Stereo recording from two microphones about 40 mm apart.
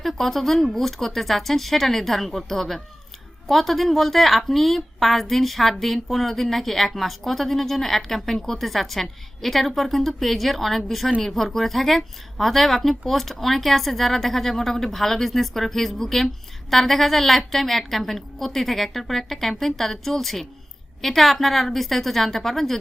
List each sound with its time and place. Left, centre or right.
0.0 s speech: centre